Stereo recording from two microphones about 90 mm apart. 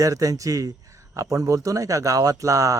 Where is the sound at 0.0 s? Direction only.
40° right (ahead or behind).